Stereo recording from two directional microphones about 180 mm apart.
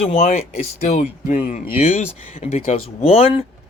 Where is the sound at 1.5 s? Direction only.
50° left (ahead or behind); by 3.4 s 30° left (ahead or behind).